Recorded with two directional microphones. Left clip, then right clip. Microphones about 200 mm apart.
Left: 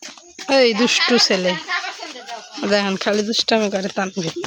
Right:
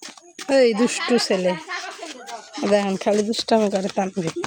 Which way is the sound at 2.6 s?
5° right (ahead or behind).